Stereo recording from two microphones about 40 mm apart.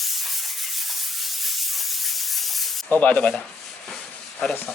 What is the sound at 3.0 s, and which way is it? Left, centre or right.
Speech, left.